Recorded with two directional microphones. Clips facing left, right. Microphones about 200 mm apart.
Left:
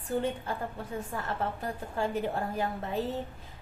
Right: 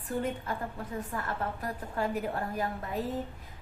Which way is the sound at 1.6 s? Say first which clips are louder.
Left 1 dB; 25° left (ahead or behind).